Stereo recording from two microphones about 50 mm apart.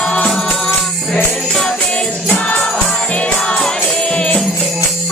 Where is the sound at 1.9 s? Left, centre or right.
Left.